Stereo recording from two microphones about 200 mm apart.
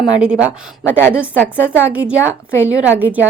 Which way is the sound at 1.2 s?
10° left (ahead or behind).